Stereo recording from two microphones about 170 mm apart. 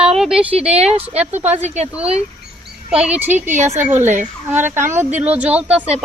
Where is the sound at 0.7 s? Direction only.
40° right (ahead or behind).